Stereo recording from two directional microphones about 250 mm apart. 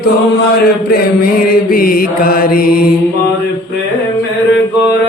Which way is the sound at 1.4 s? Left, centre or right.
Left.